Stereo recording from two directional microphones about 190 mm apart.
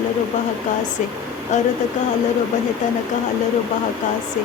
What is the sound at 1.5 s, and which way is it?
Speech, 40° left (ahead or behind).